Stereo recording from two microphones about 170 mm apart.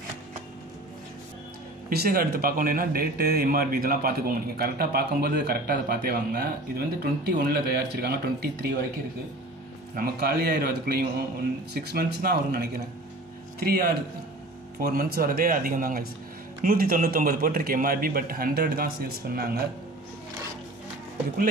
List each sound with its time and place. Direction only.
1.9 s a man's voice: 60° right (ahead or behind)
9.9 s a man's voice: 65° right (ahead or behind)